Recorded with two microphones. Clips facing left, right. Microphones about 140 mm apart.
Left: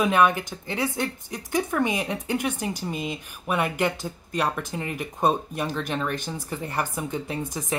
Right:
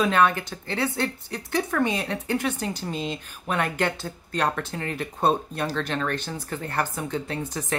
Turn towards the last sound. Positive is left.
turn(degrees=15)  # may be behind; listen again after turning